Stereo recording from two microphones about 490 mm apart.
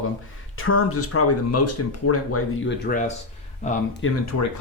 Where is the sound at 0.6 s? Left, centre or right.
Left.